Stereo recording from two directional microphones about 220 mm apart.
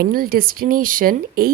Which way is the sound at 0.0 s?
40° right (ahead or behind).